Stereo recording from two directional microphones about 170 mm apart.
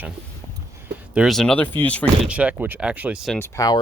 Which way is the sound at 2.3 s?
10° right (ahead or behind).